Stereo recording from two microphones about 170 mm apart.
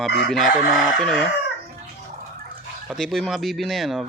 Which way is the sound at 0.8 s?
5° left (ahead or behind).